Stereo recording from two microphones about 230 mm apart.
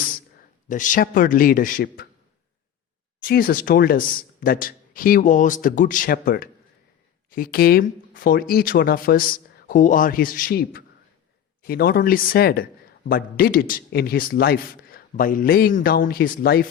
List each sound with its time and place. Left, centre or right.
0.7 s a man's voice: left
3.2 s a man's voice: left